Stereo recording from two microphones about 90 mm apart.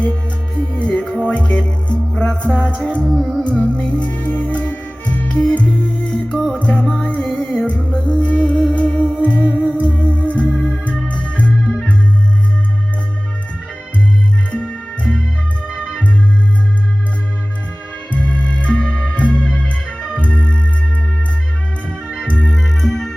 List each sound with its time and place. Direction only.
0.7 s music: 15° left (ahead or behind)
3.1 s music: centre (ahead or behind)
3.4 s music: 15° left (ahead or behind)
10.2 s organ: 15° left (ahead or behind)
10.5 s organ: 10° right (ahead or behind)
10.8 s organ: 10° left (ahead or behind)
14.5 s music: 10° left (ahead or behind)
18.1 s music: 15° left (ahead or behind)
22.3 s organ: 15° left (ahead or behind)
22.5 s music: centre (ahead or behind)